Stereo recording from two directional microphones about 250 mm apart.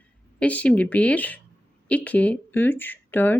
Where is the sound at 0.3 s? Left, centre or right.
Centre.